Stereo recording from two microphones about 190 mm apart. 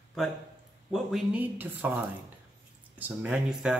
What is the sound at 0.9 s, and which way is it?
Speech, 5° right (ahead or behind).